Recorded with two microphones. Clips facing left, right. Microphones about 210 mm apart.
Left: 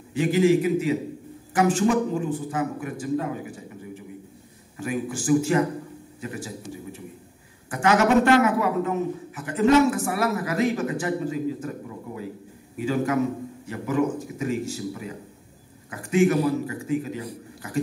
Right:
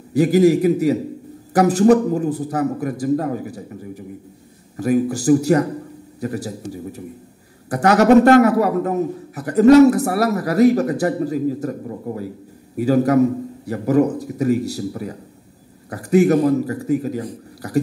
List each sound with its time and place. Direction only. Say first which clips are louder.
0.1 s a man's voice: right 6 dB; 40° right (ahead or behind)